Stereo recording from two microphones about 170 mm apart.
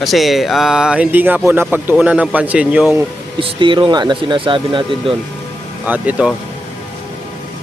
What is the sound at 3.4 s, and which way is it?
Speech, 30° right (ahead or behind).